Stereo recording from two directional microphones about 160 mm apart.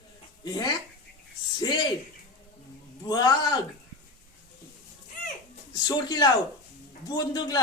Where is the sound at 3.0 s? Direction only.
25° left (ahead or behind).